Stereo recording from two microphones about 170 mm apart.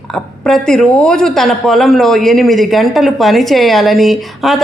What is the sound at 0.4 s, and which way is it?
Speech, centre (ahead or behind).